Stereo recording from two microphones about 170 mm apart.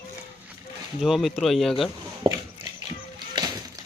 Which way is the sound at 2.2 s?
30° right (ahead or behind).